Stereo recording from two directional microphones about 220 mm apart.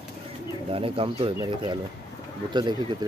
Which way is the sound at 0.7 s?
25° right (ahead or behind).